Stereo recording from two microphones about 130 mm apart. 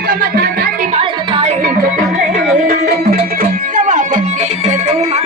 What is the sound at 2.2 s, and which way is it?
Music, 70° right (ahead or behind).